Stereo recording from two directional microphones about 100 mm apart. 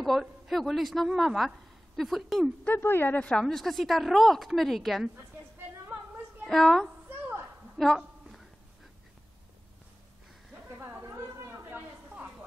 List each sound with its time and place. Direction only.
0.0 s a woman's voice: centre (ahead or behind)
2.6 s a woman's voice: 20° left (ahead or behind); by 5.1 s centre (ahead or behind)
6.4 s a woman's voice: centre (ahead or behind)
7.1 s a sound: 15° right (ahead or behind)
7.8 s a sound: centre (ahead or behind)
10.7 s chatter: 20° right (ahead or behind)